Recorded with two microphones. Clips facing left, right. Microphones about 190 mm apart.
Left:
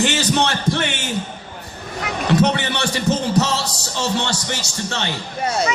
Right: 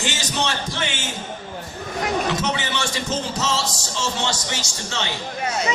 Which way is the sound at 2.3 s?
60° left (ahead or behind).